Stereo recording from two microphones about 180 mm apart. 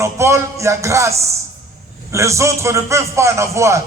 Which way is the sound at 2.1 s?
15° right (ahead or behind).